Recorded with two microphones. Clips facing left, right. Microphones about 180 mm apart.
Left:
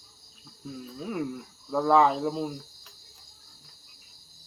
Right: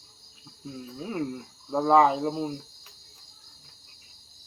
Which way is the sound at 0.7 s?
5° right (ahead or behind).